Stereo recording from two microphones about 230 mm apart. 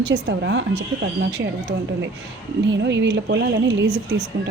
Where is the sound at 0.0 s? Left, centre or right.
Right.